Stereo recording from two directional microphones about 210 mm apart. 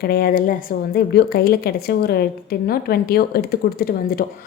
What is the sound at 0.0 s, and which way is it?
A woman's voice, 45° left (ahead or behind).